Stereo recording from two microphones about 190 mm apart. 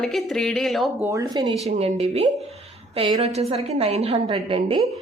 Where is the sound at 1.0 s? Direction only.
15° right (ahead or behind).